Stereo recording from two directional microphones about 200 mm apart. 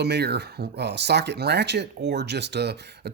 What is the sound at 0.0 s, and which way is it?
Speech, 55° right (ahead or behind).